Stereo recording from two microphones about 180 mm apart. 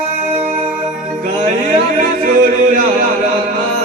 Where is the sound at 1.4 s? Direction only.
45° right (ahead or behind).